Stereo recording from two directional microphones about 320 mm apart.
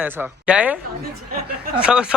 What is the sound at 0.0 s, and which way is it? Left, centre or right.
Speech, centre.